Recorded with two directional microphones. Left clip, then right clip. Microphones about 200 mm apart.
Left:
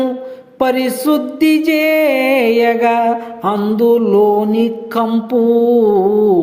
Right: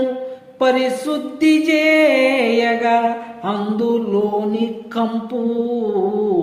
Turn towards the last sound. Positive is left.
turn(degrees=30)  # may be behind; listen again after turning